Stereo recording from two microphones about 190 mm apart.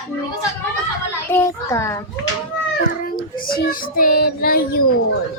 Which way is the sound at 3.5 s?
50° left (ahead or behind).